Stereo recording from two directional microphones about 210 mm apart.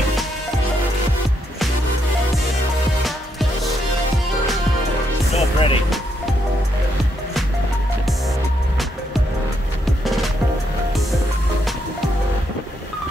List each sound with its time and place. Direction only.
5.3 s music: 25° left (ahead or behind)
10.0 s music: centre (ahead or behind)